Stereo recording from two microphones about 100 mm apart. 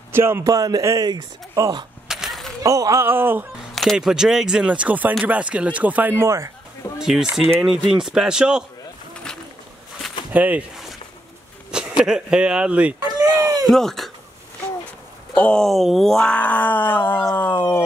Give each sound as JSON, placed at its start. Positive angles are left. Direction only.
{"t": 0.1, "sound": "speech", "side_deg": -25}
{"t": 2.0, "sound": "a sound", "side_deg": -5}
{"t": 2.6, "sound": "speech", "side_deg": -35}
{"t": 3.7, "sound": "speech", "side_deg": 0}
{"t": 7.0, "sound": "speech", "side_deg": -5}
{"t": 10.3, "sound": "speech", "side_deg": -15}
{"t": 11.7, "sound": "a sound", "side_deg": -10}
{"t": 12.1, "sound": "speech", "side_deg": -10}
{"t": 13.2, "sound": "a sound", "side_deg": -35}
{"t": 13.7, "sound": "speech", "side_deg": 5}
{"t": 15.3, "sound": "speech", "side_deg": 10}
{"t": 16.3, "sound": "cat", "side_deg": 15}
{"t": 17.4, "sound": "dog", "side_deg": 20}